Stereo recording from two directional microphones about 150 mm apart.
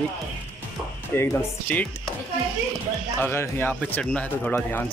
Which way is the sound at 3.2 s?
15° left (ahead or behind).